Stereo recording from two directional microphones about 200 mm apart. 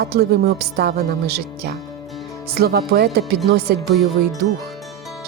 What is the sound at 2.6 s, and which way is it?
Speech, 50° right (ahead or behind).